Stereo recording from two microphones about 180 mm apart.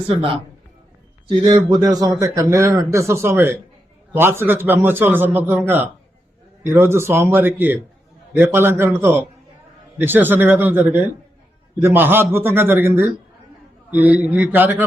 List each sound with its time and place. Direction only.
0.1 s a man's voice: 30° right (ahead or behind)
1.5 s a man's voice: 20° right (ahead or behind)